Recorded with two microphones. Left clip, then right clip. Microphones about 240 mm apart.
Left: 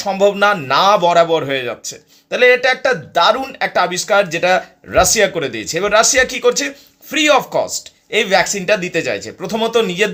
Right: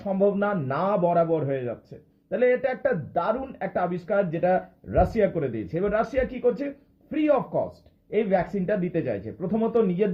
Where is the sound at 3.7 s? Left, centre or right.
Centre.